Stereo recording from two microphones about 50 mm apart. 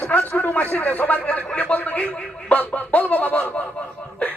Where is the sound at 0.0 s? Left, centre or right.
Left.